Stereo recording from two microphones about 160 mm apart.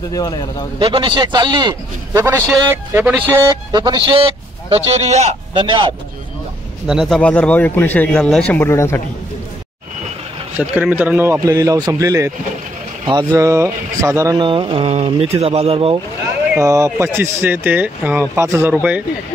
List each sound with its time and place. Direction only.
0.1 s a man's voice: 25° left (ahead or behind)
0.7 s speech: 30° right (ahead or behind)
2.1 s speech: 15° right (ahead or behind)
3.4 s a man's voice: 25° right (ahead or behind); by 5.4 s 45° right (ahead or behind)
5.5 s a man's voice: 30° right (ahead or behind)
6.9 s speech: centre (ahead or behind); by 9.0 s 15° left (ahead or behind)
10.6 s speech: 10° right (ahead or behind)
13.0 s speech: 30° right (ahead or behind)
14.4 s a man's voice: 30° right (ahead or behind)
16.5 s speech: 20° right (ahead or behind)